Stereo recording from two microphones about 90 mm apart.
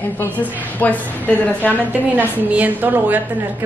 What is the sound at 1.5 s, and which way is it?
A woman's voice, 20° right (ahead or behind).